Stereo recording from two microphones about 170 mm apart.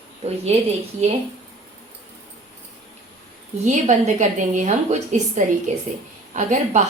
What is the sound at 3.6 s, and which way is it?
A woman's voice, 45° right (ahead or behind).